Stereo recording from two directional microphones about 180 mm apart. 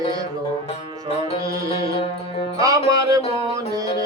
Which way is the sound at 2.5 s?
20° right (ahead or behind).